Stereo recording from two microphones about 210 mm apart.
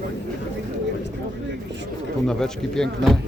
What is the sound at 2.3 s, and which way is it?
Speech, 5° left (ahead or behind).